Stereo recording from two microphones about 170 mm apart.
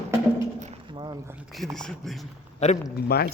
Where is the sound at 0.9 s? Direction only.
25° right (ahead or behind).